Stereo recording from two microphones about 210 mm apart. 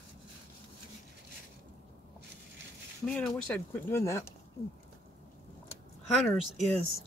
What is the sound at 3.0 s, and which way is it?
Speech, 5° left (ahead or behind).